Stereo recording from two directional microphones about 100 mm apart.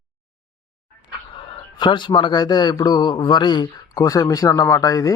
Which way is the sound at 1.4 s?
55° left (ahead or behind).